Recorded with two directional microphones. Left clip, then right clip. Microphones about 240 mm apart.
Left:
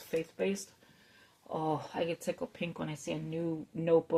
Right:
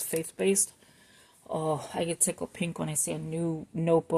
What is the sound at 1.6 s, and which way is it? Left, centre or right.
Speech, right.